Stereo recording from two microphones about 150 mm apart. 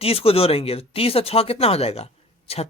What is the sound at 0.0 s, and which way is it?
Speech, 40° left (ahead or behind).